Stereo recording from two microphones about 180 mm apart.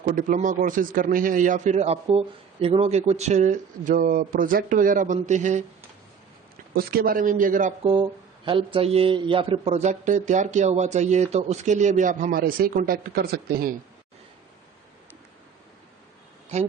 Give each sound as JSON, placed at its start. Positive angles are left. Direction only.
{"t": 0.0, "sound": "a man's voice", "side_deg": -45}
{"t": 6.7, "sound": "a man's voice", "side_deg": -55}
{"t": 7.9, "sound": "speech", "side_deg": -25}